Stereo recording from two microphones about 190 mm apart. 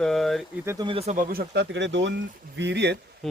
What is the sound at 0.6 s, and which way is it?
Speech, 20° right (ahead or behind).